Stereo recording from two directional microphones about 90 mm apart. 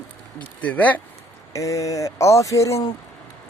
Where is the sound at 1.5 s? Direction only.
35° left (ahead or behind).